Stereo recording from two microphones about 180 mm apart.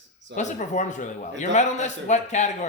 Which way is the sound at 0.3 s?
40° left (ahead or behind).